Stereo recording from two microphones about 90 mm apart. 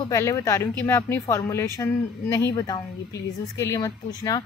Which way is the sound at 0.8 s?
25° left (ahead or behind).